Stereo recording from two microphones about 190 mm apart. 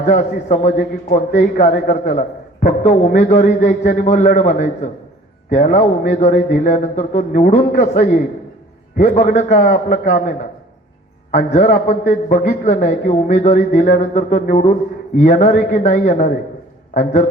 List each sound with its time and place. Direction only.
0.0 s a man's voice: 40° left (ahead or behind)